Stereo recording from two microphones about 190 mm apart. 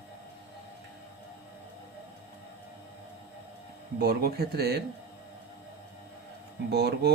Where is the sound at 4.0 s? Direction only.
55° right (ahead or behind).